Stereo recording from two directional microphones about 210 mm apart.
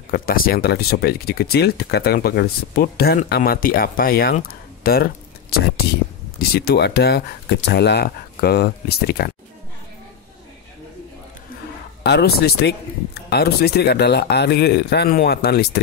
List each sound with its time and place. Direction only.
0.1 s speech: 45° left (ahead or behind)
12.0 s speech: 50° left (ahead or behind)